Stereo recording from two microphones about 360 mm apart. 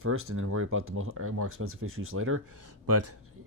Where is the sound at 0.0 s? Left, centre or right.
Right.